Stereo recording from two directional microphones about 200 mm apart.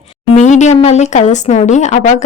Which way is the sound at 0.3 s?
35° left (ahead or behind).